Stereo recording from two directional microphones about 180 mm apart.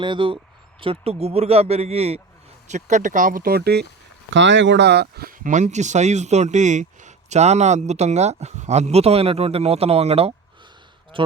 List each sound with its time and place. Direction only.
0.0 s speech: 25° right (ahead or behind); by 3.8 s 60° right (ahead or behind)
4.4 s speech: 90° right; by 10.3 s 35° right (ahead or behind)